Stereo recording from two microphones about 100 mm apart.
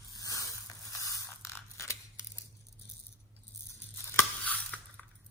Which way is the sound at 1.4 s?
30° left (ahead or behind).